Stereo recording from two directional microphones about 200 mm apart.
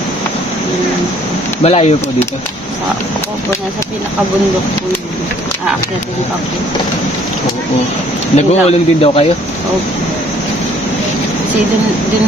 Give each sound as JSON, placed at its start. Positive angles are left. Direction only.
{"t": 1.6, "sound": "speech", "side_deg": 30}
{"t": 8.4, "sound": "speech", "side_deg": 30}